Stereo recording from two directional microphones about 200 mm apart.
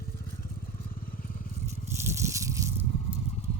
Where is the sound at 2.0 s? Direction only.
15° right (ahead or behind).